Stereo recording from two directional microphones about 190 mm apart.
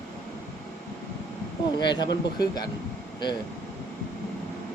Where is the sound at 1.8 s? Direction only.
25° left (ahead or behind).